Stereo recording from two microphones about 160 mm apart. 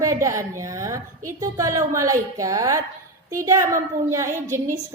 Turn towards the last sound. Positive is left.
turn(degrees=-15)  # may be behind; listen again after turning